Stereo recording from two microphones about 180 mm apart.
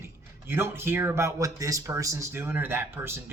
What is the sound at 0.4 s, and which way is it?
A man's voice, 15° right (ahead or behind).